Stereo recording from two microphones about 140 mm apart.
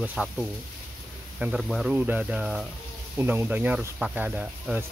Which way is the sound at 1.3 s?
5° right (ahead or behind).